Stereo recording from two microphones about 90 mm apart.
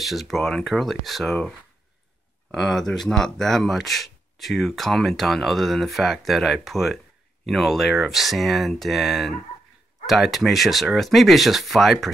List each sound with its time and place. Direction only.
0.0 s speech: centre (ahead or behind)
2.5 s speech: 5° left (ahead or behind)